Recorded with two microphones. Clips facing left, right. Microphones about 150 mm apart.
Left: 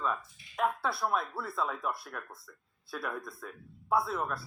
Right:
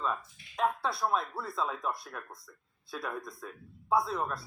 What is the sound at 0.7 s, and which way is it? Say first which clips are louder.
Speech: right 1 dB; 5° left (ahead or behind).